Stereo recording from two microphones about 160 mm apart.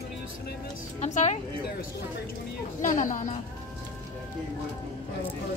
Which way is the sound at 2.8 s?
55° left (ahead or behind).